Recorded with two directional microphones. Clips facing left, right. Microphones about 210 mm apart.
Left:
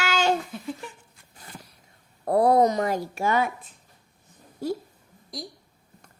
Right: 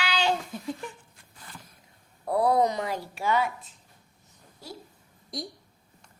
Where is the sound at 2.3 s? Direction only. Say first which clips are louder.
Left 4 dB; 45° left (ahead or behind).